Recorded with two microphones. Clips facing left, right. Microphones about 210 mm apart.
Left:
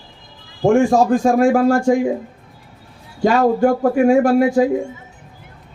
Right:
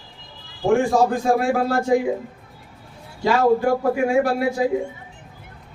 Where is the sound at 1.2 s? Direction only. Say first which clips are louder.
Left 6 dB; 50° left (ahead or behind).